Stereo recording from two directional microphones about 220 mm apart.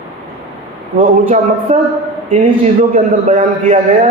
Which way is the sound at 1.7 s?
30° right (ahead or behind).